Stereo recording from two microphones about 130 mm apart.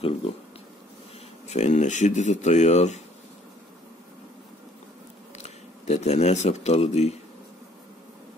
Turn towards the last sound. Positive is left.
turn(degrees=55)  # may be behind; listen again after turning